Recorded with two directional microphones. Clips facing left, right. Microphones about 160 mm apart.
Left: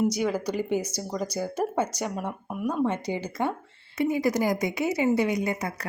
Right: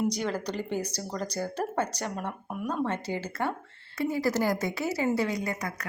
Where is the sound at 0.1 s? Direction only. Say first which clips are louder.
Left 4 dB; 10° left (ahead or behind).